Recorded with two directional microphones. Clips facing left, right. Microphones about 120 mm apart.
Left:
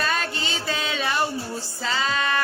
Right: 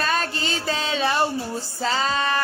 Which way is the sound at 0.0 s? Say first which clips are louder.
Right 2 dB; 35° right (ahead or behind).